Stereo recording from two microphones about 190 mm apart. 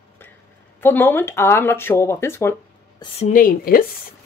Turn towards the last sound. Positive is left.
turn(degrees=50)  # may be behind; listen again after turning